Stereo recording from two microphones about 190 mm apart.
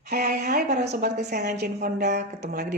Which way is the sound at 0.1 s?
55° right (ahead or behind).